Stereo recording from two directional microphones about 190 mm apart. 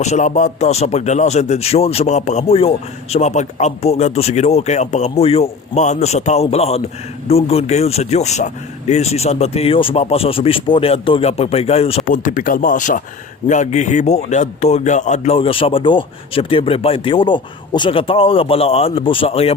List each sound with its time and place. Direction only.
0.0 s a man's voice: 40° left (ahead or behind)
12.0 s a man's voice: 45° left (ahead or behind)